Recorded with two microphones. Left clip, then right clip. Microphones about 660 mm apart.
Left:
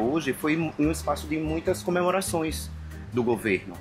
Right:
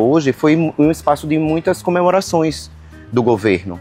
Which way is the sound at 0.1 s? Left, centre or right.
Right.